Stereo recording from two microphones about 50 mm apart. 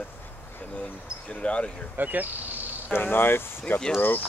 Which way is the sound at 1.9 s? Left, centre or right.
Right.